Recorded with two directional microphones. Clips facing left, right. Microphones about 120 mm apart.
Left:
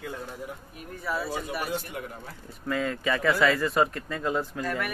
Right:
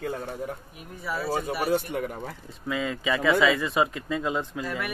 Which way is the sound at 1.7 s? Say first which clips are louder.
Right 7 dB; 65° right (ahead or behind).